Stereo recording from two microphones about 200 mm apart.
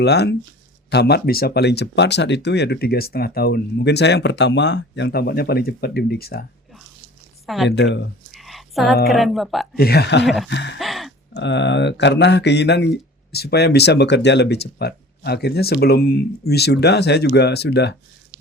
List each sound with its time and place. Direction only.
0.0 s speech: 55° left (ahead or behind)
7.4 s speech: centre (ahead or behind)
8.3 s a sound: centre (ahead or behind)
9.0 s speech: centre (ahead or behind)
9.7 s speech: 50° left (ahead or behind)
10.2 s speech: centre (ahead or behind)
10.5 s speech: 65° left (ahead or behind)
10.8 s a sound: centre (ahead or behind)
11.3 s speech: 60° left (ahead or behind)